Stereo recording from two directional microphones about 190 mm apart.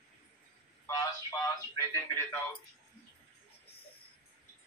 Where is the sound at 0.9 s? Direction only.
15° left (ahead or behind).